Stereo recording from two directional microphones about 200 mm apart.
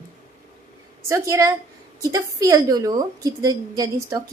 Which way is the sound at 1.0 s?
15° right (ahead or behind).